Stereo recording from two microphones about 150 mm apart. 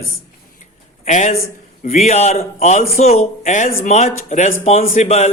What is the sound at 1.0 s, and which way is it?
A man's voice, 50° left (ahead or behind).